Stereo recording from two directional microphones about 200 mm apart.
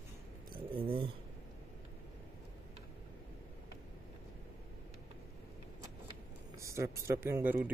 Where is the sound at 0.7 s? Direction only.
25° right (ahead or behind).